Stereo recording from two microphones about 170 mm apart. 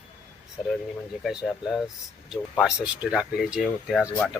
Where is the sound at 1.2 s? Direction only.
Centre (ahead or behind).